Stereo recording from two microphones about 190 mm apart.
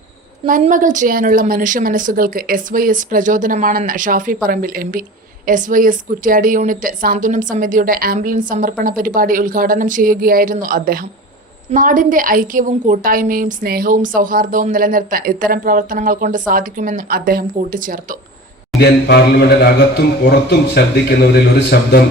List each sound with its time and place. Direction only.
0.4 s a woman's voice: 45° right (ahead or behind)
18.8 s a man's voice: 60° left (ahead or behind)